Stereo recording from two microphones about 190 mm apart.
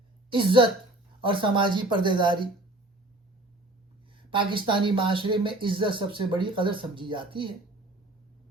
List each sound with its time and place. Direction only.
0.3 s speech: 25° right (ahead or behind)
4.3 s speech: 25° right (ahead or behind)